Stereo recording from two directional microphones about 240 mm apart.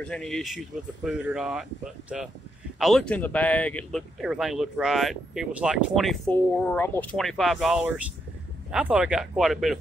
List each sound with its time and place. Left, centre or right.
0.0 s speech: centre